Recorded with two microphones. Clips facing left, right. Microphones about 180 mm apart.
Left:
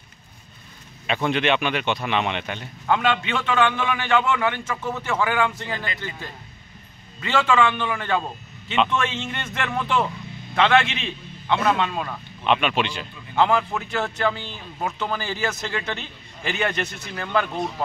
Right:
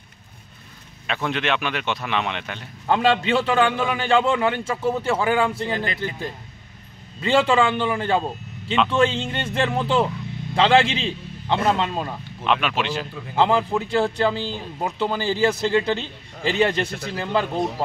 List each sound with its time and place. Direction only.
1.0 s a man's voice: centre (ahead or behind)
2.9 s a man's voice: 35° right (ahead or behind)
7.2 s a man's voice: 30° right (ahead or behind)
12.4 s a man's voice: centre (ahead or behind)
13.4 s a man's voice: 30° right (ahead or behind)